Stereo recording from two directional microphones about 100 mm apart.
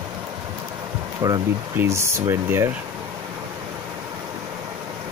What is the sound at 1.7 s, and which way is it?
Speech, 30° right (ahead or behind).